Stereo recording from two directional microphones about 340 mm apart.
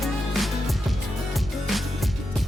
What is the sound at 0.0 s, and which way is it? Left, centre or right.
Music, centre.